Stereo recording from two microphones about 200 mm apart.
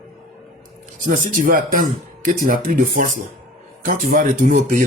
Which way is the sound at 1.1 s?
40° right (ahead or behind).